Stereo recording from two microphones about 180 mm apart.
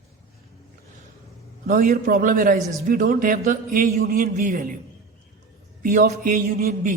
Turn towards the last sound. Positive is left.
turn(degrees=-50)  # may be behind; listen again after turning